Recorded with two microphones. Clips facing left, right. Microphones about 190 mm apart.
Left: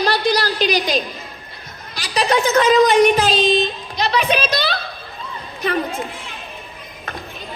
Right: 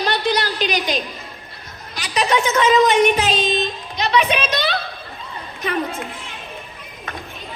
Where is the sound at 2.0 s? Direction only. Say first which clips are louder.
Left 1 dB; 35° left (ahead or behind).